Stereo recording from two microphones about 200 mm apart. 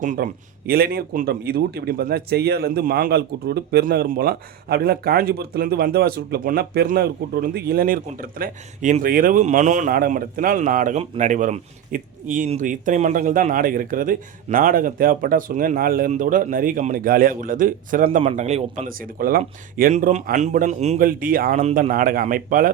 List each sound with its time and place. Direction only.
0.0 s a man's voice: 40° right (ahead or behind)
18.2 s speech: 30° right (ahead or behind)